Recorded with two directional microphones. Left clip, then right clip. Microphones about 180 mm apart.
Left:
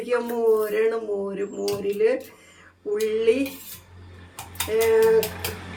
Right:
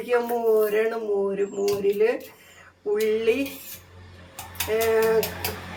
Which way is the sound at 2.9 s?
15° right (ahead or behind).